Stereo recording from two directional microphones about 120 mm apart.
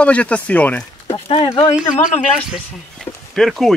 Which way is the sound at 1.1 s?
55° left (ahead or behind).